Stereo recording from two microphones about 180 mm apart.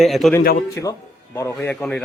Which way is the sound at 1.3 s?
15° left (ahead or behind).